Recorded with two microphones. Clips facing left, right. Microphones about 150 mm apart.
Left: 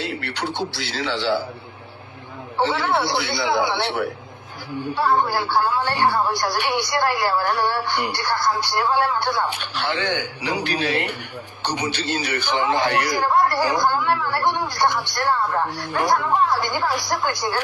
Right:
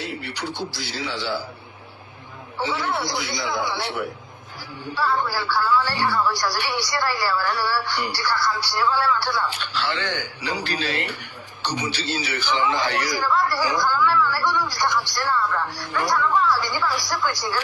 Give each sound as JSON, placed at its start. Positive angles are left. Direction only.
{"t": 0.0, "sound": "a sound", "side_deg": 75}
{"t": 0.6, "sound": "radio", "side_deg": 70}
{"t": 1.0, "sound": "a man's voice", "side_deg": 70}
{"t": 2.6, "sound": "a man's voice", "side_deg": 70}
{"t": 4.9, "sound": "speech", "side_deg": 55}